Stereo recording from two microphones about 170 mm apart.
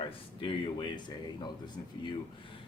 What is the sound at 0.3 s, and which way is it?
Speech, 30° left (ahead or behind).